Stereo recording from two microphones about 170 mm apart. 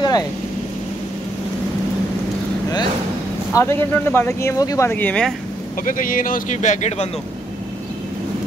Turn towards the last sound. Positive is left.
turn(degrees=40)  # may be behind; listen again after turning